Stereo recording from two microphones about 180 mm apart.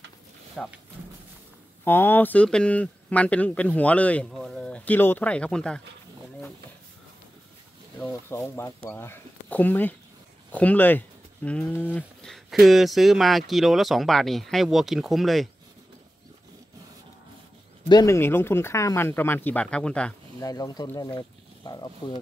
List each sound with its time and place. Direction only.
0.6 s speech: 5° left (ahead or behind)
1.9 s speech: 10° left (ahead or behind)
8.0 s speech: 15° left (ahead or behind)
17.8 s speech: 20° left (ahead or behind)
20.3 s speech: 20° left (ahead or behind)